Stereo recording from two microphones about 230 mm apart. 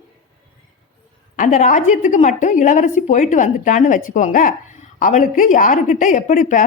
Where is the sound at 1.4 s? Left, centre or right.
Left.